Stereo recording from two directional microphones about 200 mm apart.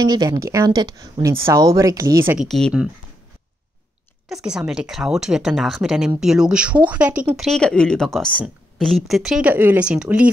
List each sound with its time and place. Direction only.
0.0 s speech: 20° right (ahead or behind)
2.3 s speech: centre (ahead or behind)
4.3 s speech: 5° right (ahead or behind)